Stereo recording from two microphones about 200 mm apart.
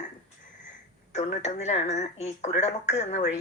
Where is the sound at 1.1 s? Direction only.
35° left (ahead or behind).